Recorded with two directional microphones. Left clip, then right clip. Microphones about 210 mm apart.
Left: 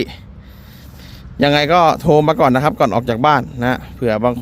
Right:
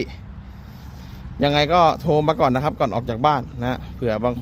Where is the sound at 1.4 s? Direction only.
40° left (ahead or behind).